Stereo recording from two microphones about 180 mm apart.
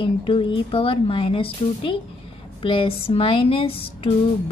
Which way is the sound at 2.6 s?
30° left (ahead or behind).